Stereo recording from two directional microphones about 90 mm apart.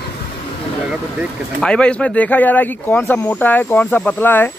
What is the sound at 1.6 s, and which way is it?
Speech, 10° left (ahead or behind).